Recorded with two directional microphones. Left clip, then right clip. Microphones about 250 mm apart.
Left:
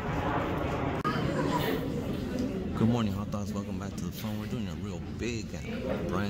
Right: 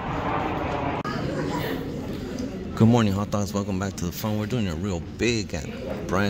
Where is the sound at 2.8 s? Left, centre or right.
Right.